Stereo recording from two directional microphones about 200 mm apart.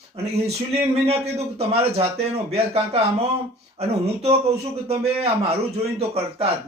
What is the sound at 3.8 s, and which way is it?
A man's voice, 30° right (ahead or behind).